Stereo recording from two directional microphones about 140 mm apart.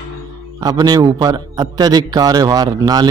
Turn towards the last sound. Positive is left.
turn(degrees=-30)  # may be behind; listen again after turning